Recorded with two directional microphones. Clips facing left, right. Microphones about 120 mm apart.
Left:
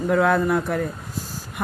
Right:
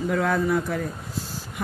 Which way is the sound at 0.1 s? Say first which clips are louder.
Left 5 dB; 60° left (ahead or behind).